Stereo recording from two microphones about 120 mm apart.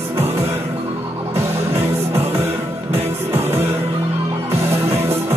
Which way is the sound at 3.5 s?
20° right (ahead or behind).